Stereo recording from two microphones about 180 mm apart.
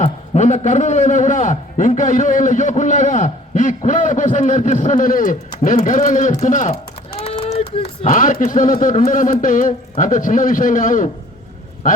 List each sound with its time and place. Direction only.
0.0 s a man's voice: 40° left (ahead or behind)
7.2 s a sound: 30° left (ahead or behind)
8.1 s a man's voice: 45° left (ahead or behind)